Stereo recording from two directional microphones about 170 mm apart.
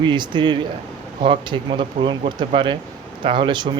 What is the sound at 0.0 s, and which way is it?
Speech, 25° right (ahead or behind).